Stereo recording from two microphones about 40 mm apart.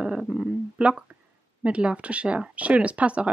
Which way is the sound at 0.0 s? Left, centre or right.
Right.